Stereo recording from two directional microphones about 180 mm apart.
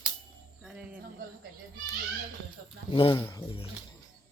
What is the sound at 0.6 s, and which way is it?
Music, 5° right (ahead or behind).